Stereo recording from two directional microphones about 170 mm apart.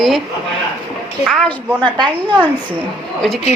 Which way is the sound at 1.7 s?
25° right (ahead or behind).